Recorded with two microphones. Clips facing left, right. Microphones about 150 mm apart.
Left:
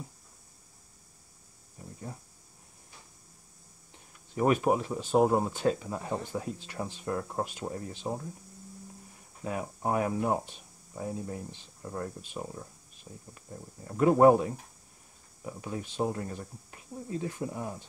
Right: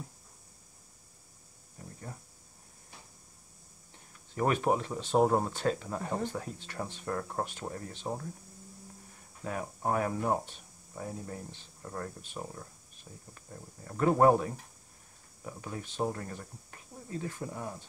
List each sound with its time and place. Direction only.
1.8 s a sound: 10° left (ahead or behind)
4.4 s speech: 10° left (ahead or behind)
9.4 s speech: 15° left (ahead or behind)